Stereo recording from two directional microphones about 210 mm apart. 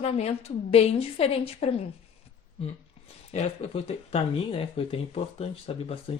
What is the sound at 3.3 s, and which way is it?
A woman's voice, 30° left (ahead or behind).